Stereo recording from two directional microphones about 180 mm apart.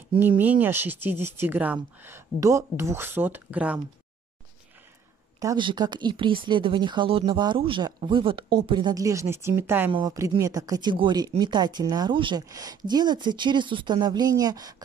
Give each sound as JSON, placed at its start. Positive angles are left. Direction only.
{"t": 0.4, "sound": "speech", "side_deg": -10}
{"t": 5.4, "sound": "speech", "side_deg": -25}